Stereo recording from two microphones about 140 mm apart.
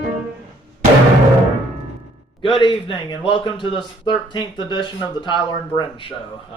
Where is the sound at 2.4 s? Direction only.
35° left (ahead or behind).